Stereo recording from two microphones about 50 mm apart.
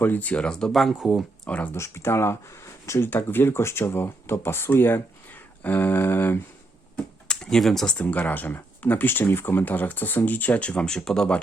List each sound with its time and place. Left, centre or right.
0.0 s speech: left
0.4 s speech: centre
0.7 s speech: centre
0.9 s speech: centre
1.5 s speech: left
1.7 s speech: left
3.0 s speech: left
7.5 s speech: centre
7.9 s speech: left
10.6 s speech: left
10.8 s speech: centre